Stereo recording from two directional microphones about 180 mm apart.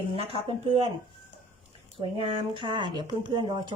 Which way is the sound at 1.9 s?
30° right (ahead or behind).